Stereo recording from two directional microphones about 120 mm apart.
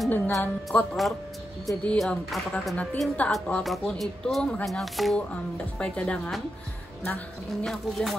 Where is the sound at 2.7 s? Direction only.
10° left (ahead or behind).